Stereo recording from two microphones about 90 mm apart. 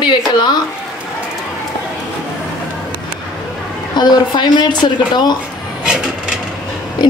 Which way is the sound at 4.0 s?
50° left (ahead or behind).